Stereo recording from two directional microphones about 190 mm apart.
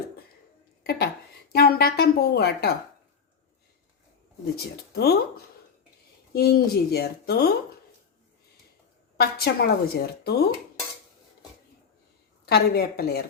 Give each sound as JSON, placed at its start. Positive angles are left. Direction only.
{"t": 0.9, "sound": "a woman's voice", "side_deg": 55}
{"t": 4.5, "sound": "a woman's voice", "side_deg": 55}
{"t": 6.3, "sound": "a woman's voice", "side_deg": 55}
{"t": 9.1, "sound": "a woman's voice", "side_deg": 55}
{"t": 12.5, "sound": "a woman's voice", "side_deg": 55}